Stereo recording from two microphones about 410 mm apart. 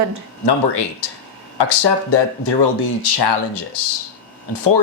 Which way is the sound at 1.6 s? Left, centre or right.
Left.